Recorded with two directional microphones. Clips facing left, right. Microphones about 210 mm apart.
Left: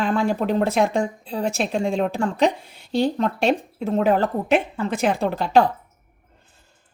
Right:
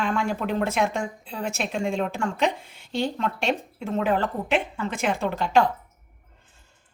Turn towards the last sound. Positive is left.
turn(degrees=35)  # may be behind; listen again after turning